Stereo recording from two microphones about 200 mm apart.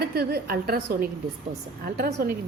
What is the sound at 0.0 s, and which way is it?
A woman's voice, 55° right (ahead or behind).